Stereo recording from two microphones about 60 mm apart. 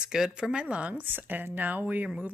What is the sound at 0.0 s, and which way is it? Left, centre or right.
Speech, centre.